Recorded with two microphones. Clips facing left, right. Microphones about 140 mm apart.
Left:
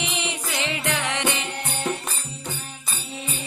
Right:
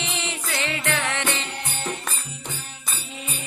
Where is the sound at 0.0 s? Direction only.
15° left (ahead or behind).